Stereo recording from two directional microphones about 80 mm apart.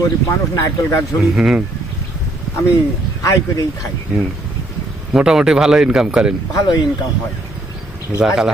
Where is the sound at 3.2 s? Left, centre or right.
Left.